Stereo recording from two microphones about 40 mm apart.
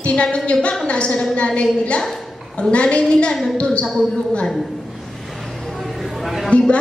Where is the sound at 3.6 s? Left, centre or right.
Left.